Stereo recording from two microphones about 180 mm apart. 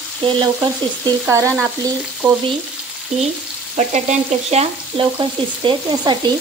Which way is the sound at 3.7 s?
40° right (ahead or behind).